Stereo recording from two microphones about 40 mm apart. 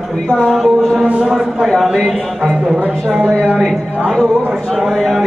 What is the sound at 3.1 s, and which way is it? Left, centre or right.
Speech, right.